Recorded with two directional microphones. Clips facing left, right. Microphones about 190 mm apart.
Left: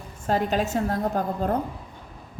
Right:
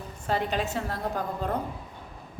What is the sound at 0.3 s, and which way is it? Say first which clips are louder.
A woman's voice: left 4 dB; 45° left (ahead or behind).